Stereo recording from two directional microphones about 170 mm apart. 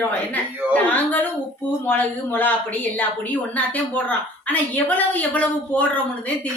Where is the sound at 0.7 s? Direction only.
10° left (ahead or behind).